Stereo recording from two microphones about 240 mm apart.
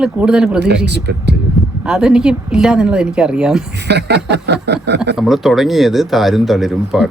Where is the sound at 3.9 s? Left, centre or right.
Right.